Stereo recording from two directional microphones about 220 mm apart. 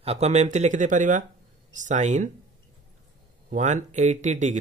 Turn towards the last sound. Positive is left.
turn(degrees=-35)  # may be behind; listen again after turning